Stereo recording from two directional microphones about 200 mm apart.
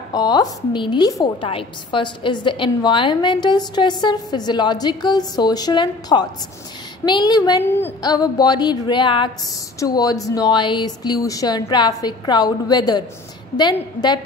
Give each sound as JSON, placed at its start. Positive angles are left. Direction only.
{"t": 0.1, "sound": "a woman's voice", "side_deg": 20}